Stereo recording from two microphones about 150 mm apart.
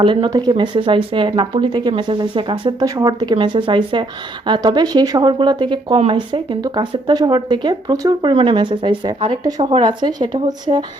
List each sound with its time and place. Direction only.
0.0 s speech: 35° right (ahead or behind)